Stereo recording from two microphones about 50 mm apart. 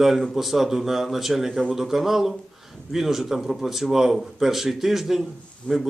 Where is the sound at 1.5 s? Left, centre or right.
Right.